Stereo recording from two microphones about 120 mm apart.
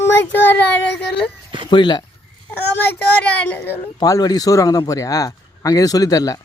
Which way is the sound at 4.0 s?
30° left (ahead or behind).